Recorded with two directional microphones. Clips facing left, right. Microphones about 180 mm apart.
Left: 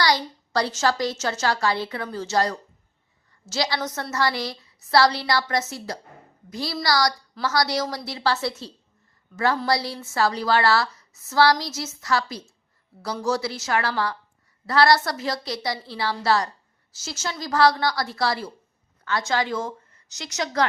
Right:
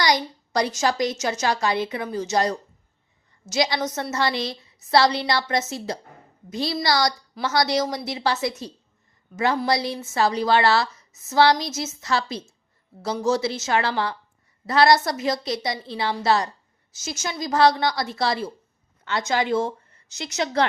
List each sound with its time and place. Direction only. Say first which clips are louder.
0.0 s a woman's voice: right 1 dB; 20° right (ahead or behind)